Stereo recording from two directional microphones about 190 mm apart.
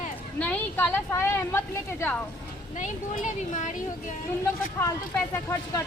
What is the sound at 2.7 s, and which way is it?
Speech, 40° left (ahead or behind).